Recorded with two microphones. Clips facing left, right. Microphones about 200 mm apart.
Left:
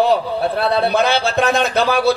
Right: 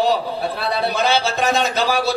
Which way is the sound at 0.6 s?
60° left (ahead or behind).